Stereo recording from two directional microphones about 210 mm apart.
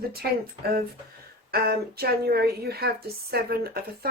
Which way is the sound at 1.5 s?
50° right (ahead or behind).